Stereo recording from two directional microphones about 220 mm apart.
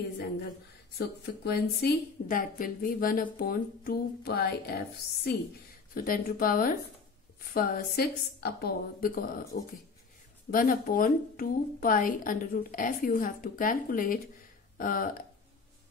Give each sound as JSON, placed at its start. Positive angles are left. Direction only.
{"t": 0.9, "sound": "a woman's voice", "side_deg": 45}
{"t": 3.3, "sound": "a sound", "side_deg": 40}
{"t": 5.9, "sound": "a woman's voice", "side_deg": 40}
{"t": 10.5, "sound": "a woman's voice", "side_deg": 40}